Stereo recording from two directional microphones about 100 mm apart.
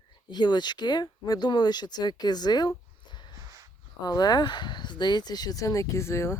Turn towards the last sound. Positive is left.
turn(degrees=25)  # may be behind; listen again after turning